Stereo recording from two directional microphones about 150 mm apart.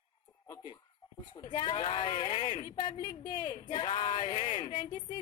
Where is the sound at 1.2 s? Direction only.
30° left (ahead or behind).